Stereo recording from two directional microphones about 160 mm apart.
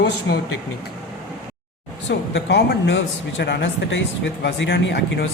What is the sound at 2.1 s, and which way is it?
A man's voice, 90° left.